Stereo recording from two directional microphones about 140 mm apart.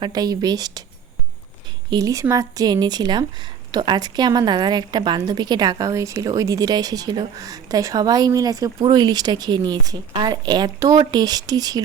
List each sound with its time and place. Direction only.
0.0 s a woman's voice: 30° right (ahead or behind)
1.9 s a woman's voice: 25° right (ahead or behind)